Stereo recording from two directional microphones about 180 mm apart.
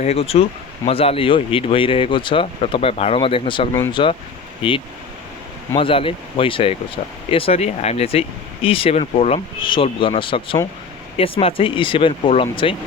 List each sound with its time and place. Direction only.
0.0 s speech: 35° left (ahead or behind)